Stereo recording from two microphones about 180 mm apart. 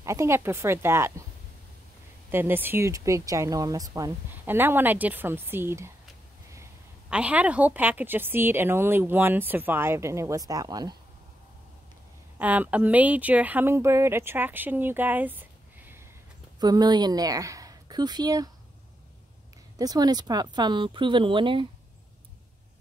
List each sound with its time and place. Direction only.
0.0 s a woman's voice: 15° right (ahead or behind)
2.3 s a woman's voice: 10° right (ahead or behind)
7.1 s a woman's voice: 5° right (ahead or behind); by 11.0 s 20° right (ahead or behind)
12.4 s a woman's voice: 10° right (ahead or behind)
16.5 s a woman's voice: 20° right (ahead or behind)
19.8 s speech: 20° right (ahead or behind)